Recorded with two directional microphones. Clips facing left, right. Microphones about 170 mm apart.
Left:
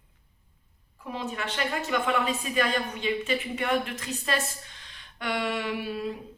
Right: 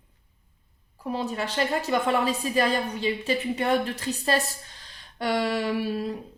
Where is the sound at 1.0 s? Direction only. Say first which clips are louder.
Right 4 dB; 35° right (ahead or behind).